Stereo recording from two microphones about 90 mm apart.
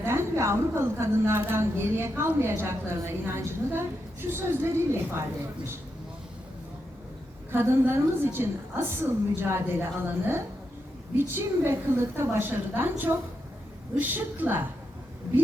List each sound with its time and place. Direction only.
0.0 s a woman's voice: 30° right (ahead or behind)
7.5 s a woman's voice: 25° right (ahead or behind)